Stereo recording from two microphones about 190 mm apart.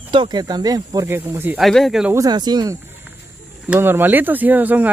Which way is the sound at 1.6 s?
Centre (ahead or behind).